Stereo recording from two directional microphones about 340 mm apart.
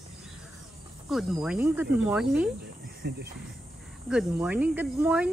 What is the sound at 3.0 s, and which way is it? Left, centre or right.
Speech, right.